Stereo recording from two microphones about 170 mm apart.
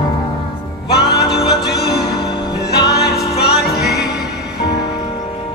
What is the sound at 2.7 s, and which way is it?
Music, 70° left (ahead or behind).